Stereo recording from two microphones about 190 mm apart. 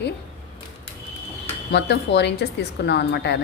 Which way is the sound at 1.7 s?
60° left (ahead or behind).